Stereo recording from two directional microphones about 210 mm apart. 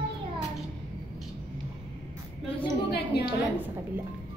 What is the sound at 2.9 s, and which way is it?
Speech, 50° left (ahead or behind).